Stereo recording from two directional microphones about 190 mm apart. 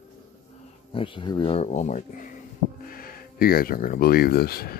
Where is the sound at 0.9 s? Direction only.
25° left (ahead or behind).